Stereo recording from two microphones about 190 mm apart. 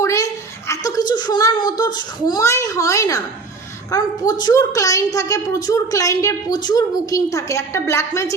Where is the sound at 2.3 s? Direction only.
15° left (ahead or behind).